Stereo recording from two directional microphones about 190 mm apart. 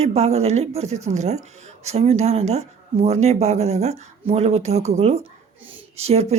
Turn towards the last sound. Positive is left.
turn(degrees=-35)  # may be behind; listen again after turning